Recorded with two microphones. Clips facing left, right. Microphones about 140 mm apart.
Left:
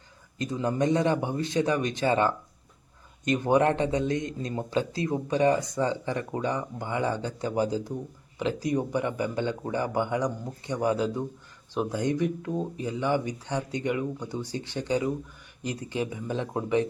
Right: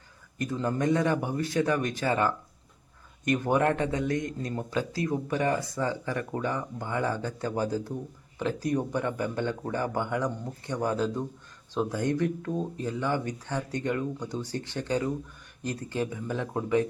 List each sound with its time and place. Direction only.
0.3 s speech: 15° left (ahead or behind)